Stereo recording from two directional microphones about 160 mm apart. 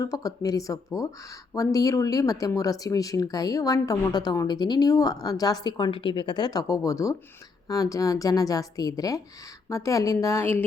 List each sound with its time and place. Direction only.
0.0 s speech: 20° left (ahead or behind)